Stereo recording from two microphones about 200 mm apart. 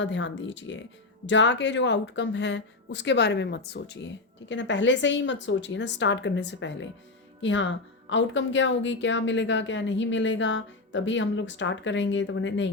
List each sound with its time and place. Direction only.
0.0 s a woman's voice: 65° left (ahead or behind)